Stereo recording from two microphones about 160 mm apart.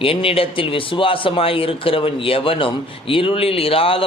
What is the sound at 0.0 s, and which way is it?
A man's voice, 35° left (ahead or behind).